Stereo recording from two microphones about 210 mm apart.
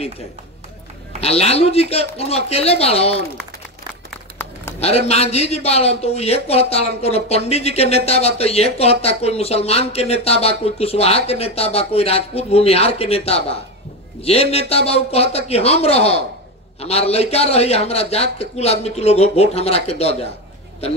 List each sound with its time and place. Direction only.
1.2 s a man's voice: 30° left (ahead or behind)
4.7 s a man's voice: 30° left (ahead or behind)